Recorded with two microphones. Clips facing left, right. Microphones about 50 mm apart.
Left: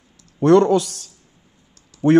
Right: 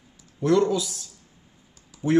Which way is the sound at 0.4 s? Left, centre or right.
Left.